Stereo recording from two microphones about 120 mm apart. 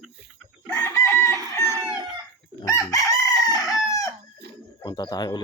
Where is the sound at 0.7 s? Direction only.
25° left (ahead or behind).